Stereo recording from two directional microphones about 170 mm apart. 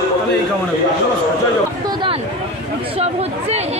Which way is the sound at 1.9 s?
30° right (ahead or behind).